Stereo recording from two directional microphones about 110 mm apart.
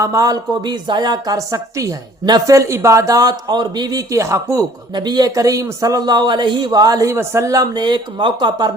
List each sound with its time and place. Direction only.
0.0 s speech: 30° right (ahead or behind)
4.9 s speech: 40° right (ahead or behind)